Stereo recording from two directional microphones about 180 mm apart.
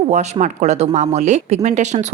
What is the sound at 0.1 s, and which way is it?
Speech, 40° right (ahead or behind).